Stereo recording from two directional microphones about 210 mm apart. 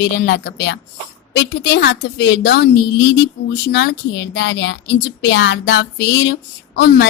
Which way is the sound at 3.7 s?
55° left (ahead or behind).